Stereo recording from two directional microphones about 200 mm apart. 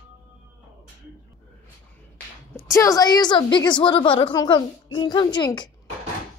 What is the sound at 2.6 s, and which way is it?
A woman's voice, 15° left (ahead or behind).